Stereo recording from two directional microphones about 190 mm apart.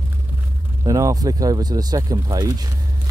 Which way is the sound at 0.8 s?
15° right (ahead or behind).